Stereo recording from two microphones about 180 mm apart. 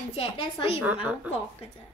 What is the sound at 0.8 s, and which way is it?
Speech, 10° right (ahead or behind).